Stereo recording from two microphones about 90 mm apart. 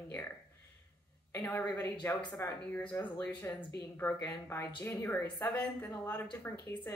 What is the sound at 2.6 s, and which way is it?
Speech, 15° left (ahead or behind).